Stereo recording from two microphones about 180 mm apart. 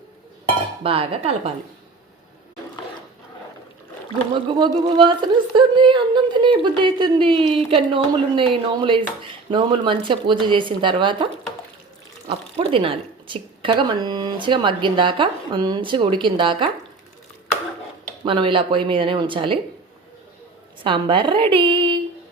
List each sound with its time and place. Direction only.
0.8 s speech: 30° right (ahead or behind)
4.4 s speech: 25° right (ahead or behind)
12.3 s speech: 30° right (ahead or behind)
18.3 s speech: 30° right (ahead or behind)
20.8 s speech: 25° right (ahead or behind)